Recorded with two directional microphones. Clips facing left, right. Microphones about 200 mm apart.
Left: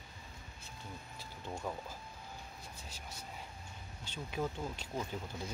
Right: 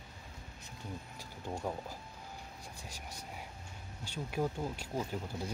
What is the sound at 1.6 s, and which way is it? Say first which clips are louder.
Speech: right 2 dB; 20° right (ahead or behind).